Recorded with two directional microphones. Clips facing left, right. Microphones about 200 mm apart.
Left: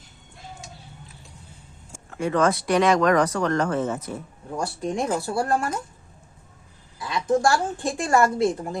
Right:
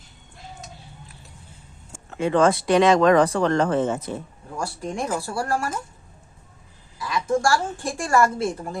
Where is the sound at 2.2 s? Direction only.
25° right (ahead or behind).